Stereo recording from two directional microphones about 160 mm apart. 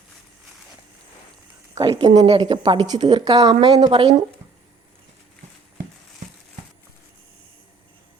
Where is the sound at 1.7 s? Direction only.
20° right (ahead or behind).